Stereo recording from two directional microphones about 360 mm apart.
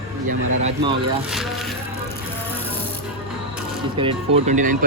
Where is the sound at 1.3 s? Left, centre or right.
Centre.